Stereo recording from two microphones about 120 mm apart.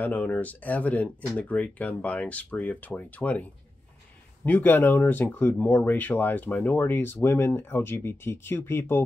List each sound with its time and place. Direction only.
0.0 s speech: 15° left (ahead or behind)
4.5 s speech: 15° left (ahead or behind)